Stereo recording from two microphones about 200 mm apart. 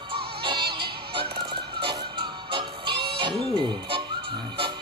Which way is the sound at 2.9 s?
55° right (ahead or behind).